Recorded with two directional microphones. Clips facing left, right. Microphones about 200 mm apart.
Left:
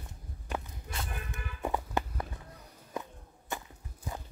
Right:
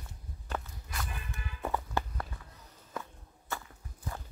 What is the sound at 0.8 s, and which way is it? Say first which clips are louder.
Music: left 2 dB; 25° left (ahead or behind).